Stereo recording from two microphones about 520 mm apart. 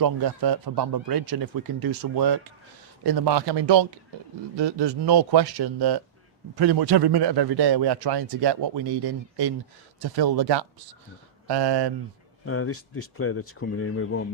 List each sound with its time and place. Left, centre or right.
0.0 s a man's voice: right
10.0 s a man's voice: right
12.5 s speech: left